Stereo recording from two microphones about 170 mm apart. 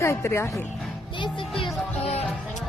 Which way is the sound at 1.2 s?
30° left (ahead or behind).